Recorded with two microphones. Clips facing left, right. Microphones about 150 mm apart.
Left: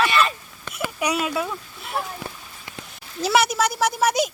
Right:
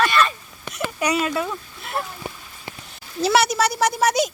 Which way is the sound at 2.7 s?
30° right (ahead or behind).